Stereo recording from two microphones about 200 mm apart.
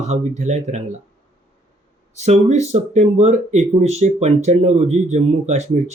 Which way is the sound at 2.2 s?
35° right (ahead or behind).